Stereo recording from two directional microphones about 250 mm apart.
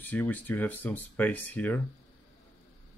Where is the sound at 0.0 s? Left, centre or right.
Centre.